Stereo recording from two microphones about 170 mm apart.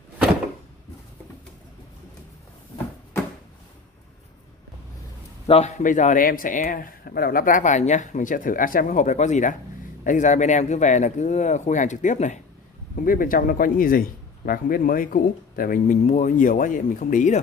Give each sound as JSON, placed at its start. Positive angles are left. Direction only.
{"t": 5.5, "sound": "a man's voice", "side_deg": 40}